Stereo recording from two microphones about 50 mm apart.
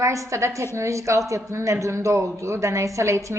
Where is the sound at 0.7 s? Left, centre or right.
Right.